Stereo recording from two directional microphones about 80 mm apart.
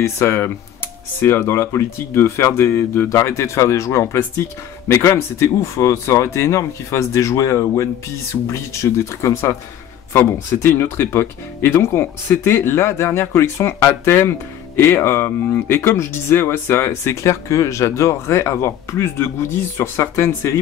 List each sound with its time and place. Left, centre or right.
0.0 s speech: left